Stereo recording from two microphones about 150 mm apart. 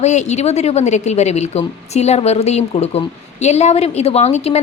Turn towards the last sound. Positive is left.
turn(degrees=45)  # may be behind; listen again after turning